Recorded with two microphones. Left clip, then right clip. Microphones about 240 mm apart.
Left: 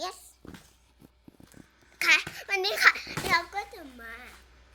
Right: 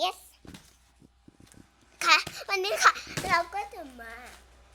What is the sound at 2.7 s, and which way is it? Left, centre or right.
Children playing, centre.